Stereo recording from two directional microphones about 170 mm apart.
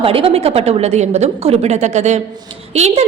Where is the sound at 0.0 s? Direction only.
35° right (ahead or behind).